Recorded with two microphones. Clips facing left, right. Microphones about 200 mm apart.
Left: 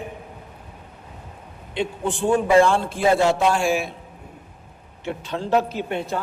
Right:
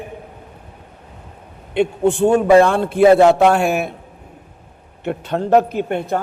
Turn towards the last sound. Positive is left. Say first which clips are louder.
# right 6 dB
turn(degrees=-55)  # may be behind; listen again after turning